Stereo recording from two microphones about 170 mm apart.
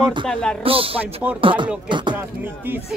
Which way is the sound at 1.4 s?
30° right (ahead or behind).